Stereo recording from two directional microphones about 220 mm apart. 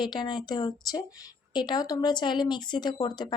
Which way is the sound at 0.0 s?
20° left (ahead or behind).